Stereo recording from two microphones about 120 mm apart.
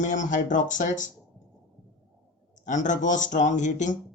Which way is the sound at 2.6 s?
90° left.